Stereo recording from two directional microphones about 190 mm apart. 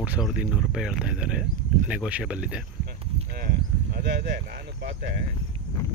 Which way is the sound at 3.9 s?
55° right (ahead or behind).